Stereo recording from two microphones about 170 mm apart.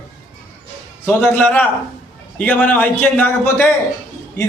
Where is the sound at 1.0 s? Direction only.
10° left (ahead or behind).